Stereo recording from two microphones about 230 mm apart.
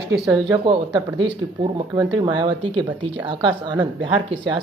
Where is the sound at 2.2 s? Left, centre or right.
Centre.